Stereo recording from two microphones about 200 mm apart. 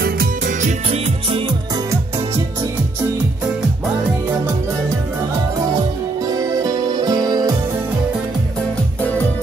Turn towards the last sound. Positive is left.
turn(degrees=-20)  # may be behind; listen again after turning